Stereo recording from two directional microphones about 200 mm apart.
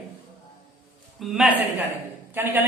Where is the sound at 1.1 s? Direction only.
Centre (ahead or behind).